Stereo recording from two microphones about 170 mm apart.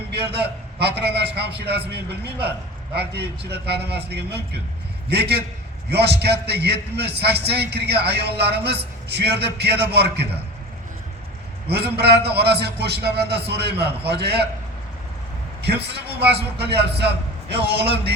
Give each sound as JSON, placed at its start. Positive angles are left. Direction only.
{"t": 0.1, "sound": "a man's voice", "side_deg": -75}
{"t": 11.9, "sound": "a man's voice", "side_deg": -75}
{"t": 15.6, "sound": "a man's voice", "side_deg": -75}